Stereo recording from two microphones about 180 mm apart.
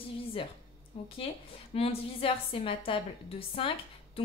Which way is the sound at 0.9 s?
30° left (ahead or behind).